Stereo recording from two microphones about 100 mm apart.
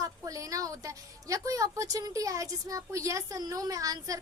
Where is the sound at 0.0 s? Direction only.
35° right (ahead or behind).